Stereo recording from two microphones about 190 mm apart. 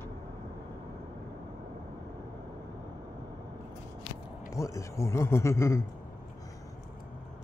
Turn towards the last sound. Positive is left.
turn(degrees=15)  # may be behind; listen again after turning